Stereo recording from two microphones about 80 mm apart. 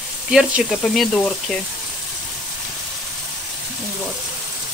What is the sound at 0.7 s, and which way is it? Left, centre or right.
Speech, centre.